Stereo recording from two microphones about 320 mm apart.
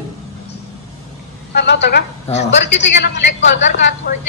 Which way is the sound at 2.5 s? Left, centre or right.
Left.